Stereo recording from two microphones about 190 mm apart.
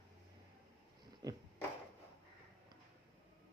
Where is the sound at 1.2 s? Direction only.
20° right (ahead or behind).